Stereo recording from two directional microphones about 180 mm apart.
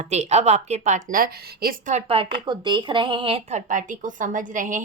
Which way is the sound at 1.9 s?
30° right (ahead or behind).